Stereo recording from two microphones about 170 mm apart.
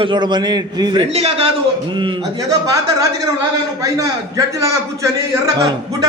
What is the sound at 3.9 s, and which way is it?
A man's voice, 20° right (ahead or behind).